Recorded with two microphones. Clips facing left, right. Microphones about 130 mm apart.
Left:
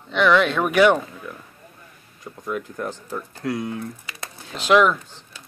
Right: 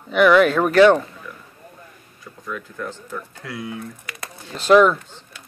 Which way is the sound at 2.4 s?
25° left (ahead or behind).